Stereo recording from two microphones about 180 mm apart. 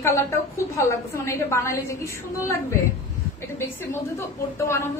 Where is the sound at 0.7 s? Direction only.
15° left (ahead or behind).